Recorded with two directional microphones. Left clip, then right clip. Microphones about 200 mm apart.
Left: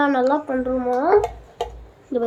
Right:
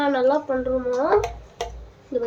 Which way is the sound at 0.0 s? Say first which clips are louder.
Left 1 dB; 25° left (ahead or behind).